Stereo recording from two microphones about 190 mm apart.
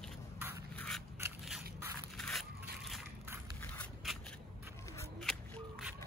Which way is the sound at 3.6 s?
10° left (ahead or behind).